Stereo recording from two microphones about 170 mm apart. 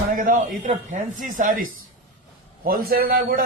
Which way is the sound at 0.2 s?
50° right (ahead or behind).